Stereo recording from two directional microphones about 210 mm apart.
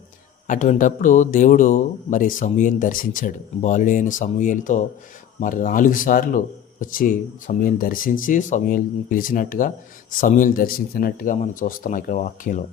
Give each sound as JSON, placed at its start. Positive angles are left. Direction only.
{"t": 0.4, "sound": "speech", "side_deg": 35}